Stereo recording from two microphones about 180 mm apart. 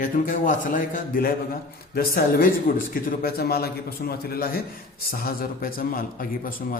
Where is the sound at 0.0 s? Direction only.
45° left (ahead or behind).